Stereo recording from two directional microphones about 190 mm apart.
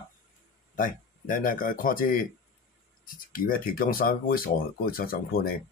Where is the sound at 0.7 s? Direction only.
45° left (ahead or behind).